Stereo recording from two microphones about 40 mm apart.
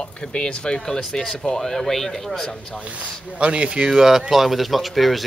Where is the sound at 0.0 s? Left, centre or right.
Left.